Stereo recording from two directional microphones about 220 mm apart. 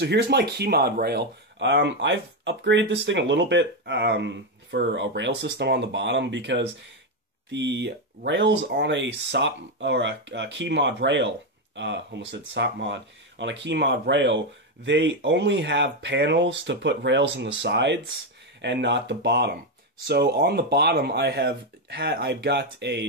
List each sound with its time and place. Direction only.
0.0 s speech: 50° right (ahead or behind)